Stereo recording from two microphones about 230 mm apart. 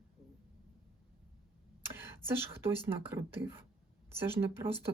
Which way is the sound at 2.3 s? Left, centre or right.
Centre.